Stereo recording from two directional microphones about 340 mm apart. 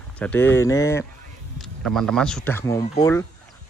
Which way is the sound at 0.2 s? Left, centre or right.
Centre.